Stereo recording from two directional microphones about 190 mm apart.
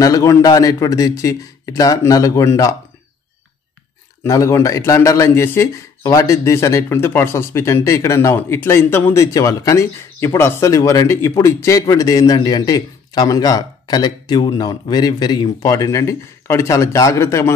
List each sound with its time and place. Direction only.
0.0 s a man's voice: 15° left (ahead or behind)
4.2 s speech: 15° left (ahead or behind)